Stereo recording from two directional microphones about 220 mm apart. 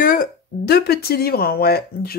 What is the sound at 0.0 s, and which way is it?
Speech, 40° left (ahead or behind).